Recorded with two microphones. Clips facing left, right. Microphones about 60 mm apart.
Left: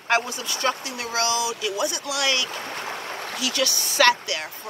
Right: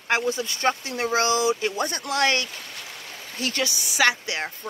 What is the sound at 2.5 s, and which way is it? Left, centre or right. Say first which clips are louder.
Stream: left 8 dB; left.